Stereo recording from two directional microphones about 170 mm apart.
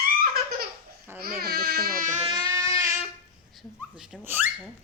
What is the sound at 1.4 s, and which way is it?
Speech, 65° right (ahead or behind).